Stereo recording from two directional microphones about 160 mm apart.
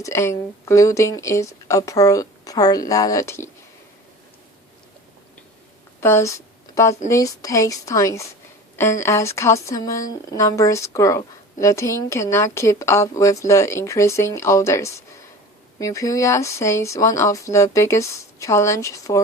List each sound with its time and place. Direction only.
0.0 s speech: 15° left (ahead or behind)
6.0 s a sound: 15° left (ahead or behind)
7.1 s speech: 20° left (ahead or behind)